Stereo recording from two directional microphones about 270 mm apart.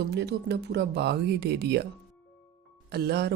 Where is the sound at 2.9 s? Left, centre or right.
Right.